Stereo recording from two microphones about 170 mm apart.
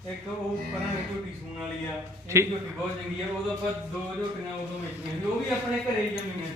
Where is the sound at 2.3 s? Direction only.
15° right (ahead or behind).